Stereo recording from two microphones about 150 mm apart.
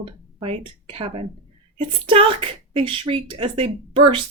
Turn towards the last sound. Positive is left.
turn(degrees=-35)  # may be behind; listen again after turning